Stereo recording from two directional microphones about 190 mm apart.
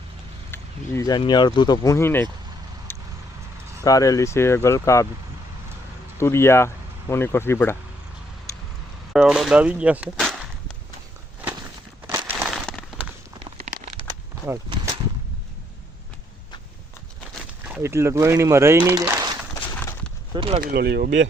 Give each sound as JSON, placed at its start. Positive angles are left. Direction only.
{"t": 0.5, "sound": "speech", "side_deg": 15}
{"t": 2.9, "sound": "vehicle", "side_deg": 10}
{"t": 3.8, "sound": "speech", "side_deg": 20}
{"t": 6.1, "sound": "speech", "side_deg": 15}
{"t": 9.1, "sound": "speech", "side_deg": -5}
{"t": 12.0, "sound": "a sound", "side_deg": -10}
{"t": 12.5, "sound": "a sound", "side_deg": 5}
{"t": 13.6, "sound": "crumpling", "side_deg": -50}
{"t": 17.7, "sound": "speech", "side_deg": -15}
{"t": 20.3, "sound": "speech", "side_deg": -25}
{"t": 20.6, "sound": "speech", "side_deg": -60}